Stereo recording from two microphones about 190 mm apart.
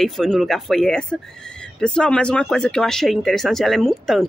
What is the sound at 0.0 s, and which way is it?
Speech, centre (ahead or behind).